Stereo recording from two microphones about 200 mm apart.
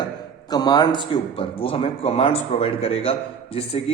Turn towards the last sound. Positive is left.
turn(degrees=30)  # may be behind; listen again after turning